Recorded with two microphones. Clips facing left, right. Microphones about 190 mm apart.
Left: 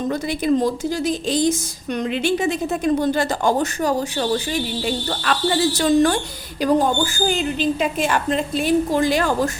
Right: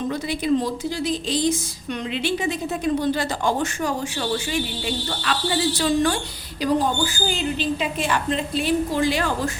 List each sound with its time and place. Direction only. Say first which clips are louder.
0.1 s speech: left 3 dB; 45° left (ahead or behind)
5.2 s speech: left 4 dB; 50° left (ahead or behind)